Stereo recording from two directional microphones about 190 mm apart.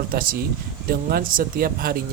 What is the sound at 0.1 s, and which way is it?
Speech, 50° right (ahead or behind).